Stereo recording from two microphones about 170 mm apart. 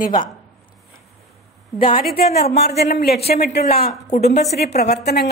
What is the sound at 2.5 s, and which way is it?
A woman's voice, 75° left (ahead or behind).